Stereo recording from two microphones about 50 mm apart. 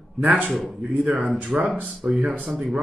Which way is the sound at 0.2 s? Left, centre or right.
Right.